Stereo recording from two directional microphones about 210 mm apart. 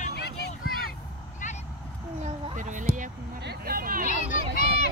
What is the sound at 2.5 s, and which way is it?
Music, 35° right (ahead or behind).